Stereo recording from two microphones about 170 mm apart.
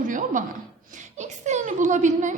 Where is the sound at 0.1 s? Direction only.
50° right (ahead or behind).